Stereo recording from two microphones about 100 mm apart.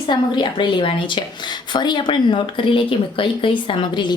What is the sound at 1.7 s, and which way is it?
Speech, 50° left (ahead or behind).